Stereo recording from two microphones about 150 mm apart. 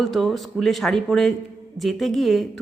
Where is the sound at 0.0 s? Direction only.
Centre (ahead or behind).